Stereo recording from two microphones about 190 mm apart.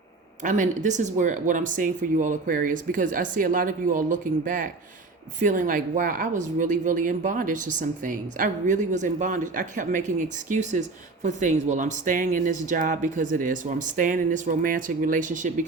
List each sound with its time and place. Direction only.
0.4 s speech: 40° right (ahead or behind)